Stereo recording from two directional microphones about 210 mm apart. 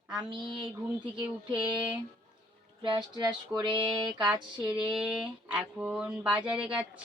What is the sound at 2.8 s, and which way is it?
Speech, 20° right (ahead or behind).